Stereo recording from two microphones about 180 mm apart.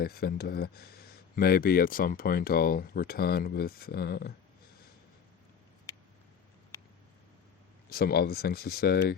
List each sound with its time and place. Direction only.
0.0 s speech: 60° left (ahead or behind)
7.9 s speech: 60° left (ahead or behind)